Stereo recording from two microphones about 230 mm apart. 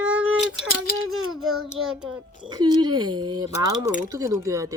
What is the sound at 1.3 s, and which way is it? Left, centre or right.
A child's voice, centre.